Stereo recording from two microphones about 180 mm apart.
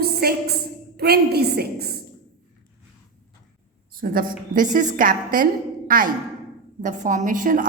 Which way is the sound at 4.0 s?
50° right (ahead or behind).